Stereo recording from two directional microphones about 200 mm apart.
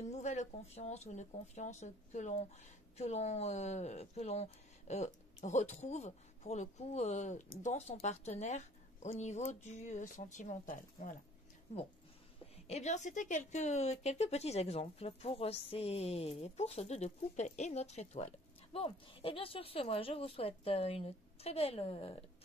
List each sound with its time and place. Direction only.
0.0 s speech: 35° left (ahead or behind)
12.6 s speech: 35° left (ahead or behind)